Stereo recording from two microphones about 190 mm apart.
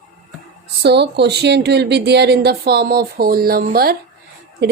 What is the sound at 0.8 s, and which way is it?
A woman's voice, 60° right (ahead or behind).